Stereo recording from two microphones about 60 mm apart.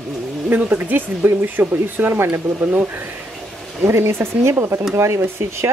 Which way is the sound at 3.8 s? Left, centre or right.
Right.